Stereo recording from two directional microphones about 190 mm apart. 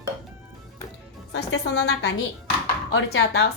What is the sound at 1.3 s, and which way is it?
A woman's voice, 65° left (ahead or behind).